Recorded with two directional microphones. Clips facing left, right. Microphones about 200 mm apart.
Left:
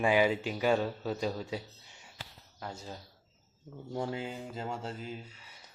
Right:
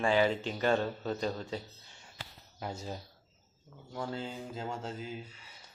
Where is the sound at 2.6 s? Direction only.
15° right (ahead or behind).